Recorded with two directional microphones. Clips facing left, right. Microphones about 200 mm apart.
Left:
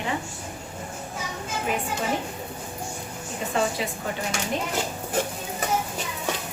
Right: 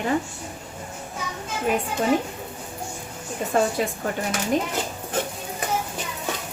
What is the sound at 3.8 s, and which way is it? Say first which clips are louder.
Speech: right 5 dB; 50° right (ahead or behind).